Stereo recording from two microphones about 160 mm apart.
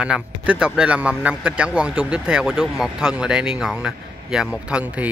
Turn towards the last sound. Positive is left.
turn(degrees=-10)  # may be behind; listen again after turning